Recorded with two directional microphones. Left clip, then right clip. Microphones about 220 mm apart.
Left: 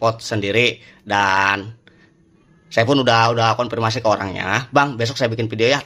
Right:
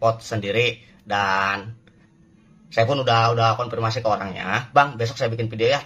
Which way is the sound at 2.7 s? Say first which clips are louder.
Left 4 dB; 45° left (ahead or behind).